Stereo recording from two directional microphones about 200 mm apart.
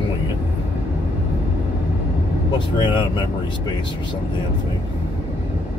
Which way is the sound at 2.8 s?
25° left (ahead or behind).